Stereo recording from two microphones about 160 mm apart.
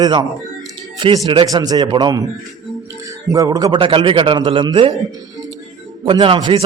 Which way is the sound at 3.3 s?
20° right (ahead or behind).